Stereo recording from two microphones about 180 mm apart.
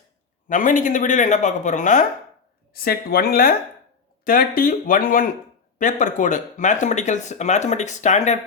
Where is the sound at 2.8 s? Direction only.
55° left (ahead or behind).